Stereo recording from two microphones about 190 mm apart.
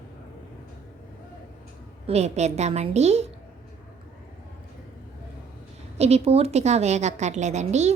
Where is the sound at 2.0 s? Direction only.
35° right (ahead or behind).